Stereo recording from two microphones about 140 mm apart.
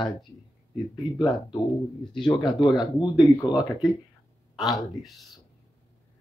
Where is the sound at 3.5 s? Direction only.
5° right (ahead or behind).